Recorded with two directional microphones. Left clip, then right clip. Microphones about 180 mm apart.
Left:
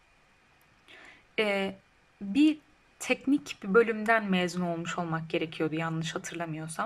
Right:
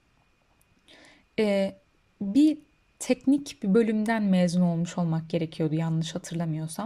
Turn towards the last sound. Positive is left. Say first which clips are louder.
# right 1 dB
turn(degrees=-30)  # may be behind; listen again after turning